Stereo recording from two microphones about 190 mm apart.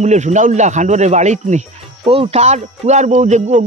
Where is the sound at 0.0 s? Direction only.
40° right (ahead or behind).